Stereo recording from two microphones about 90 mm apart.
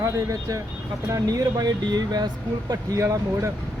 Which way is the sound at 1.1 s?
45° right (ahead or behind).